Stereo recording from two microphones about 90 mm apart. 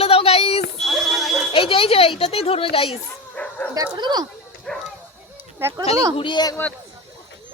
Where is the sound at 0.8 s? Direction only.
Centre (ahead or behind).